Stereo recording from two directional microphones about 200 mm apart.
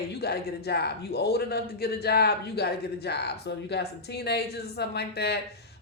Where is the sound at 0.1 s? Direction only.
55° left (ahead or behind).